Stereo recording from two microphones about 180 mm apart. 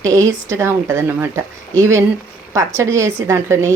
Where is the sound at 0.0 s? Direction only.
15° right (ahead or behind).